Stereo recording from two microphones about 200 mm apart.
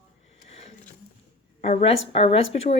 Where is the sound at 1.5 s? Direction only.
35° left (ahead or behind).